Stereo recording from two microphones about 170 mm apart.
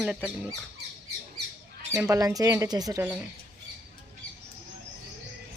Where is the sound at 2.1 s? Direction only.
20° right (ahead or behind).